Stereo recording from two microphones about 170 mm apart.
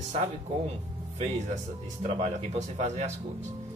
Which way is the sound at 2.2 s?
40° right (ahead or behind).